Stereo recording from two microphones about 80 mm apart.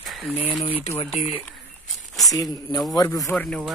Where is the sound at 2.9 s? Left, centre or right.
Left.